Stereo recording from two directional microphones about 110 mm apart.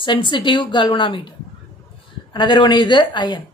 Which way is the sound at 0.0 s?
45° left (ahead or behind).